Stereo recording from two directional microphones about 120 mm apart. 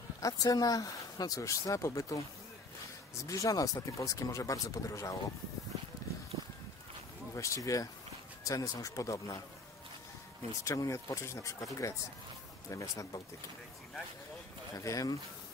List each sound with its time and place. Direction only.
0.2 s speech: 30° left (ahead or behind)
3.3 s speech: 30° left (ahead or behind)
7.3 s speech: 25° left (ahead or behind)
10.6 s speech: 25° left (ahead or behind)
14.8 s speech: 30° left (ahead or behind)